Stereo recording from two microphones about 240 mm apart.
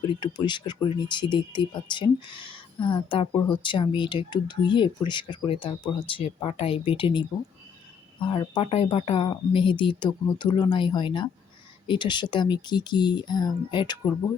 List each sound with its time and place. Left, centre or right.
0.1 s speech: centre